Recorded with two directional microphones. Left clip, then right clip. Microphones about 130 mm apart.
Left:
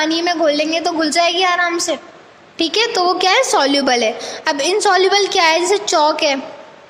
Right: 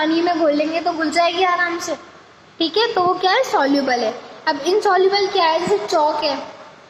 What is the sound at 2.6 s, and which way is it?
Speech, 85° left.